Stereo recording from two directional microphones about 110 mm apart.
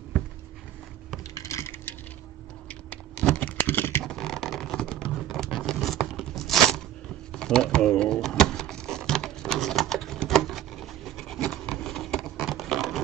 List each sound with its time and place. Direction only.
1.3 s wood: 30° left (ahead or behind)
2.7 s computer keyboard: 10° left (ahead or behind)
4.0 s vehicle: 5° left (ahead or behind)
6.0 s a sound: centre (ahead or behind)